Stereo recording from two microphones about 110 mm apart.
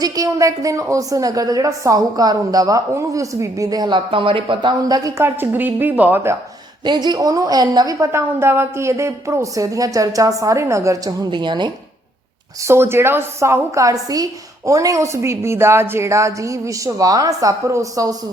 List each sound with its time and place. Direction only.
0.0 s a woman's voice: 30° right (ahead or behind); by 4.7 s 50° right (ahead or behind)
4.9 s a woman's voice: 35° right (ahead or behind); by 6.3 s 15° right (ahead or behind)
6.8 s a woman's voice: 40° right (ahead or behind)
11.3 s speech: 45° right (ahead or behind)
12.6 s a woman's voice: 20° right (ahead or behind)